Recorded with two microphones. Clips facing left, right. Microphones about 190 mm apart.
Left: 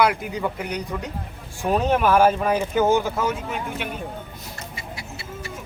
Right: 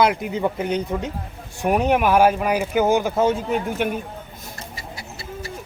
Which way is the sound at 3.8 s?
45° right (ahead or behind).